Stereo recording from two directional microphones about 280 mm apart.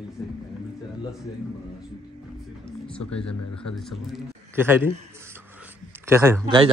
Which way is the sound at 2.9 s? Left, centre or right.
Centre.